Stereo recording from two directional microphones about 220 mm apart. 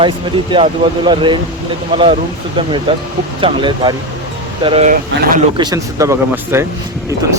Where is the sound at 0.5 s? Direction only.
20° right (ahead or behind).